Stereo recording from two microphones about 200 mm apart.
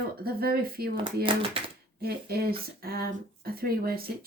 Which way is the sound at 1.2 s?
25° right (ahead or behind).